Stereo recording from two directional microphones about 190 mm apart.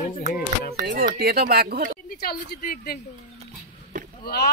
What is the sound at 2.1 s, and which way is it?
Speech, 55° left (ahead or behind).